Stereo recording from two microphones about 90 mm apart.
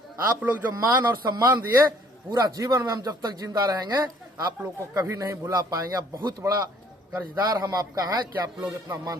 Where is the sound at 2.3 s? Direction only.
45° right (ahead or behind); by 6.6 s 30° right (ahead or behind).